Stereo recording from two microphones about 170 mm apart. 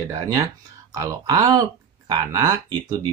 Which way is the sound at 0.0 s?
20° right (ahead or behind).